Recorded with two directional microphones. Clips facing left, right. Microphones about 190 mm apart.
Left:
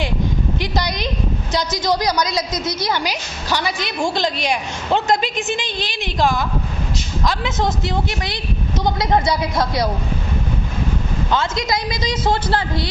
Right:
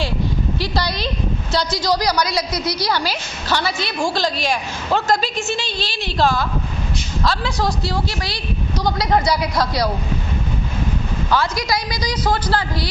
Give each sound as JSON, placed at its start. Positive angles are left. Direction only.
{"t": 0.6, "sound": "a woman's voice", "side_deg": 20}
{"t": 11.3, "sound": "a woman's voice", "side_deg": 20}